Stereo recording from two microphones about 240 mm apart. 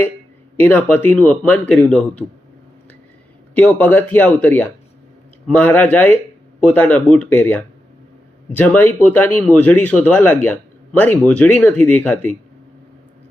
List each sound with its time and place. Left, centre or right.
0.5 s speech: centre
3.5 s speech: centre